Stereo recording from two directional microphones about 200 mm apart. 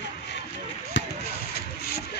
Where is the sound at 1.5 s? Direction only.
50° left (ahead or behind).